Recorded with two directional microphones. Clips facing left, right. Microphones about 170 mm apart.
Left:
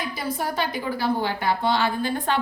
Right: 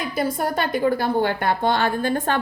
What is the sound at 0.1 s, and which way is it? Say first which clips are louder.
A woman's voice: right 5 dB; 50° right (ahead or behind).